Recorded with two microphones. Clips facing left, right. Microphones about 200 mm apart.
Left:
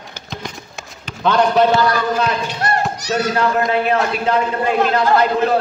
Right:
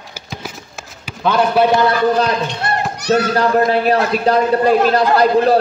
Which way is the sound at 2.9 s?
60° right (ahead or behind).